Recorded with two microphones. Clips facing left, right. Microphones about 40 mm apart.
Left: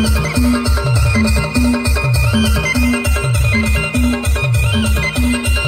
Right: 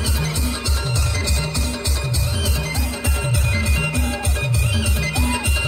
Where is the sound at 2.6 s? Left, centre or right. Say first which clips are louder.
Left 11 dB; left.